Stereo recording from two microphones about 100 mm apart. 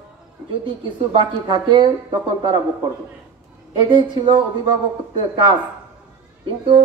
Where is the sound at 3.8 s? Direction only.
50° right (ahead or behind).